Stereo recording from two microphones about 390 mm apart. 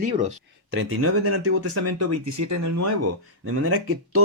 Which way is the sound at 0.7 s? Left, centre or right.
Right.